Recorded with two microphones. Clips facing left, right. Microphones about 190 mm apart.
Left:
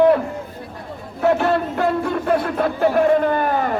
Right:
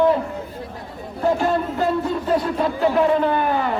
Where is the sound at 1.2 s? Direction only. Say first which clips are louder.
Left 2 dB; 65° left (ahead or behind); by 3.7 s 45° left (ahead or behind).